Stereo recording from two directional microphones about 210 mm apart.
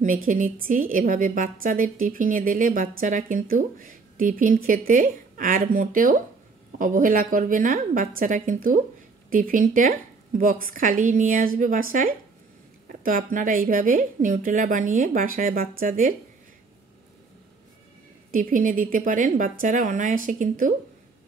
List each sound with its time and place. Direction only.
0.0 s a woman's voice: 40° right (ahead or behind)
18.3 s a woman's voice: 40° right (ahead or behind)